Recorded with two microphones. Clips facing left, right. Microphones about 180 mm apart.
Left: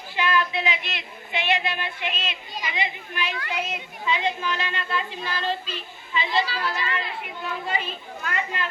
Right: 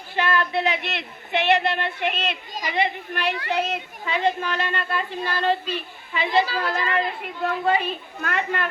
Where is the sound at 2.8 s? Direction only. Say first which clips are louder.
Right 7 dB; 60° right (ahead or behind).